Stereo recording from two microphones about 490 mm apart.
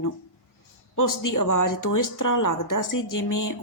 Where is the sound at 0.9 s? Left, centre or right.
Left.